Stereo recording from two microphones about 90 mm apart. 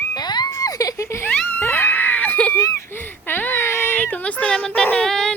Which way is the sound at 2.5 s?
35° left (ahead or behind).